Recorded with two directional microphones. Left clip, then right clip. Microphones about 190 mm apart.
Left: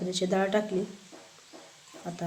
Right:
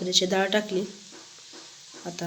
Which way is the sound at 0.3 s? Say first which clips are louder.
Right 2 dB; 5° right (ahead or behind).